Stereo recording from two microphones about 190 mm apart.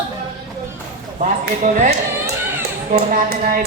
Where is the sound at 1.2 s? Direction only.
40° right (ahead or behind).